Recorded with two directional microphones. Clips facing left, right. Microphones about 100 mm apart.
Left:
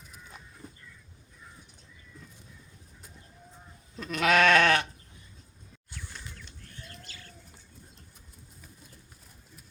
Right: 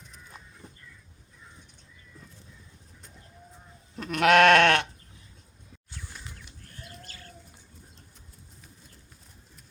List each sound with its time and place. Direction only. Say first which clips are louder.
3.9 s goat: right 4 dB; 65° right (ahead or behind)
7.1 s bird: right 1 dB; 45° right (ahead or behind)